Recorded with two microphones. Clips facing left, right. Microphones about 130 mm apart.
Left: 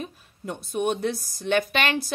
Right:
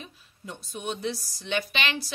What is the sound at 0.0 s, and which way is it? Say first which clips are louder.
A woman's voice: left 8 dB; 55° left (ahead or behind).